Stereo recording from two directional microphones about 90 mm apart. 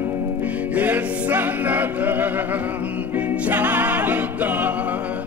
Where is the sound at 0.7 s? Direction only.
20° right (ahead or behind).